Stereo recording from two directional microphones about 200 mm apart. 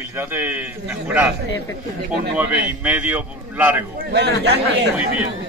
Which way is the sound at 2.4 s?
5° right (ahead or behind).